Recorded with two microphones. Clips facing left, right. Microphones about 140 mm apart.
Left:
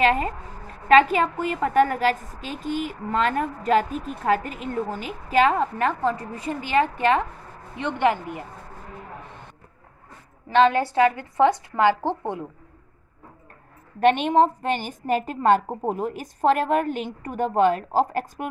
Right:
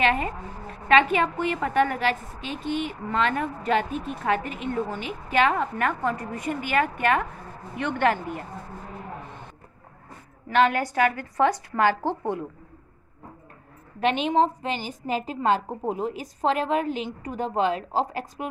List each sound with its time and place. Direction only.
0.0 s a woman's voice: 35° left (ahead or behind)
7.8 s a woman's voice: 15° left (ahead or behind)
10.5 s a woman's voice: 25° left (ahead or behind)
13.9 s a woman's voice: 45° left (ahead or behind)